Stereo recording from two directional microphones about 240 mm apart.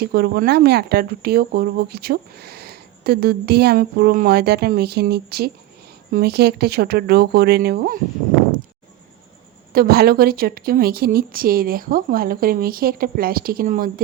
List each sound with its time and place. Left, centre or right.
0.0 s speech: right
9.7 s speech: right